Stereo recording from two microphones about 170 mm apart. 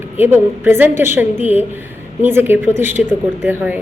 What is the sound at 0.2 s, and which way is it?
A woman's voice, 10° right (ahead or behind).